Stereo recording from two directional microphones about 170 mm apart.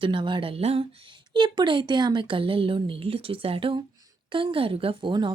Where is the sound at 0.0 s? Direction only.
30° right (ahead or behind).